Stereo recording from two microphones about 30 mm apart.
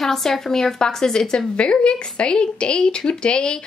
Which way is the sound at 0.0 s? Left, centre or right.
Centre.